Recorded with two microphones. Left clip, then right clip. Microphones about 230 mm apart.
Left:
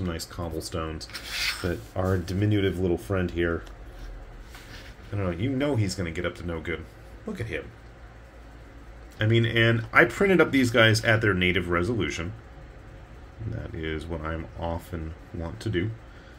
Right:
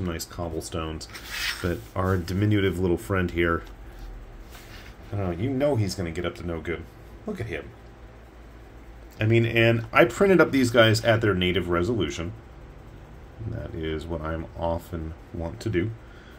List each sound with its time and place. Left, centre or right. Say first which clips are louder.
0.0 s speech: right 1 dB; centre
1.6 s speech: right 1 dB; centre
5.1 s speech: even; centre
9.2 s speech: right 2 dB; centre
13.6 s speech: right 2 dB; centre